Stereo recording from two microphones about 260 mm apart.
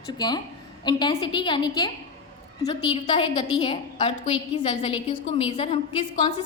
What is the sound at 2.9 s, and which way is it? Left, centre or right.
A woman's voice, centre.